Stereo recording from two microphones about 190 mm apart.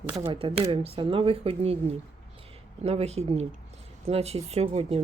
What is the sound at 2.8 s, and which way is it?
Speech, 35° right (ahead or behind).